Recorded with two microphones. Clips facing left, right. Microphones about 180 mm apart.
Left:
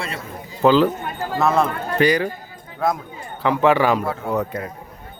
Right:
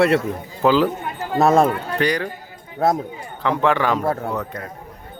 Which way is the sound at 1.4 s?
45° right (ahead or behind).